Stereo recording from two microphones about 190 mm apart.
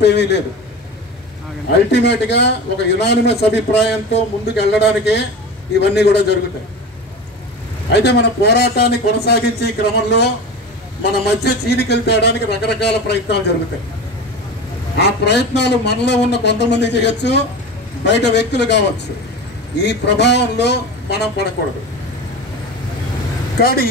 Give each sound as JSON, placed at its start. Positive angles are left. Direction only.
{"t": 0.0, "sound": "a man's voice", "side_deg": 65}
{"t": 1.9, "sound": "a man's voice", "side_deg": 65}
{"t": 7.9, "sound": "a man's voice", "side_deg": 60}
{"t": 11.4, "sound": "a man's voice", "side_deg": 60}
{"t": 15.0, "sound": "a man's voice", "side_deg": 65}
{"t": 23.6, "sound": "speech", "side_deg": 55}